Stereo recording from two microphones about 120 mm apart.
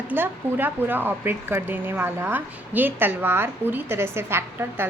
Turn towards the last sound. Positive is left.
turn(degrees=-20)  # may be behind; listen again after turning